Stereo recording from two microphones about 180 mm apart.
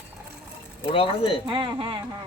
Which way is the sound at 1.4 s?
25° right (ahead or behind).